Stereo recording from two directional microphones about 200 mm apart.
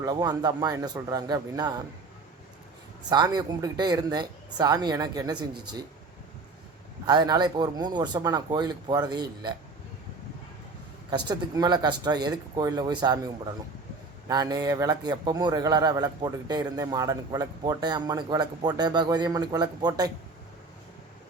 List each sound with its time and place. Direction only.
0.0 s a man's voice: 20° right (ahead or behind)
3.1 s a man's voice: 20° right (ahead or behind)
7.1 s a man's voice: 20° right (ahead or behind)
11.1 s a man's voice: 20° right (ahead or behind)